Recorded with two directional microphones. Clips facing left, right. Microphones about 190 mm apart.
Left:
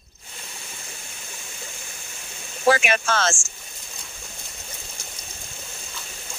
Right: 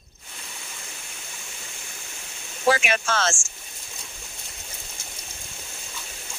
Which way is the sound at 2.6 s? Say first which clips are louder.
Left 2 dB; 50° left (ahead or behind).